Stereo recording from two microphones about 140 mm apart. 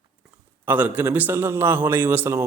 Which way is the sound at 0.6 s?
15° right (ahead or behind).